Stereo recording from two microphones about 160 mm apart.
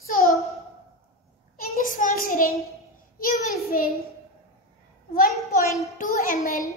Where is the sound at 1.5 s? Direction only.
60° left (ahead or behind).